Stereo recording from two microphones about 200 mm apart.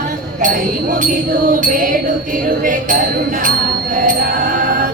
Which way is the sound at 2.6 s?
40° right (ahead or behind).